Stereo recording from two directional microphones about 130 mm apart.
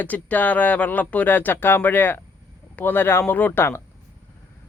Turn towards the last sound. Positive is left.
turn(degrees=15)  # may be behind; listen again after turning